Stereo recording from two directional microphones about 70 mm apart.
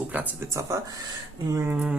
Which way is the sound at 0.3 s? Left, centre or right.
Right.